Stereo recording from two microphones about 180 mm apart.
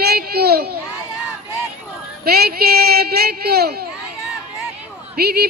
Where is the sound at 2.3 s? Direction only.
60° right (ahead or behind).